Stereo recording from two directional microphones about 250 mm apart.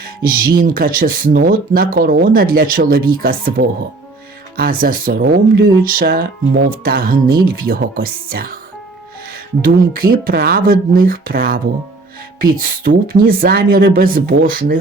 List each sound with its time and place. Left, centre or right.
0.2 s speech: right
4.5 s speech: right
9.6 s speech: right